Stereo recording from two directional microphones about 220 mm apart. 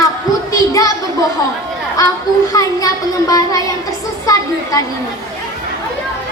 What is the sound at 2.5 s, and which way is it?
Speech, 15° left (ahead or behind).